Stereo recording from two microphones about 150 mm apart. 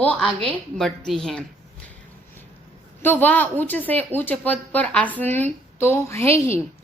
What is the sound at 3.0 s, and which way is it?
Speech, 15° left (ahead or behind).